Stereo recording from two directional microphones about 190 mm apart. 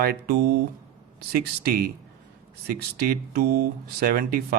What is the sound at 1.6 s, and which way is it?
Speech, 50° right (ahead or behind).